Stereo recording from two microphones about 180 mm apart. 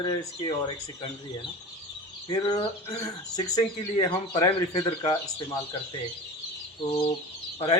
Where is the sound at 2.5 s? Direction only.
20° left (ahead or behind).